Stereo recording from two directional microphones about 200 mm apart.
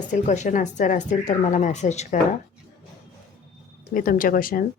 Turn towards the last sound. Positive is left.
turn(degrees=45)  # may be behind; listen again after turning